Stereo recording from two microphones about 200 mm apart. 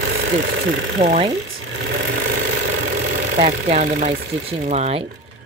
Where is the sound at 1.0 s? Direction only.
40° right (ahead or behind).